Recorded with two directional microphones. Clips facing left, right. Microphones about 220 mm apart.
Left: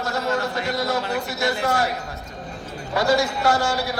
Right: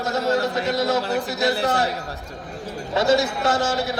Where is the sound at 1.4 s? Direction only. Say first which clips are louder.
Right 1 dB; 35° right (ahead or behind).